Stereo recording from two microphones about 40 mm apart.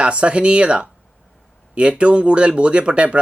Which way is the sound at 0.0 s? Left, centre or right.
Right.